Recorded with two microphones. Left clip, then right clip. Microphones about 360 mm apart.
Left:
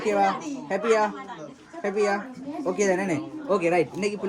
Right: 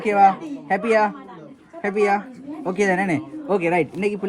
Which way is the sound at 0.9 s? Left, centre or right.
Right.